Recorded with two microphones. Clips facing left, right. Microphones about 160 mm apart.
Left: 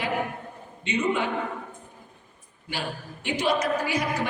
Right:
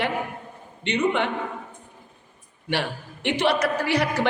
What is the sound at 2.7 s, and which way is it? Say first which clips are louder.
A woman's voice: right 6 dB; 65° right (ahead or behind).